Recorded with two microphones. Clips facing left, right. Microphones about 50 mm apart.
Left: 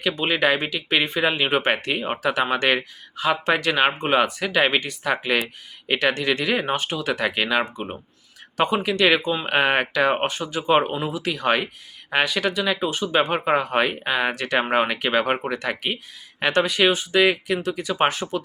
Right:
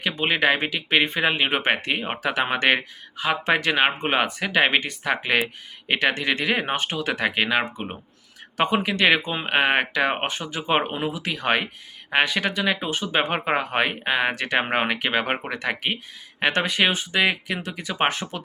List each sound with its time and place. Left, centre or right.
0.2 s speech: centre
9.5 s speech: centre; by 18.4 s right